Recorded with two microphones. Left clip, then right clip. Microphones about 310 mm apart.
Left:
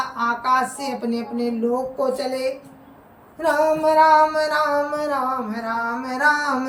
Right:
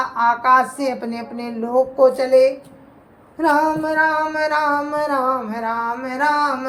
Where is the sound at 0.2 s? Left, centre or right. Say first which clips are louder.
Right 6 dB; centre.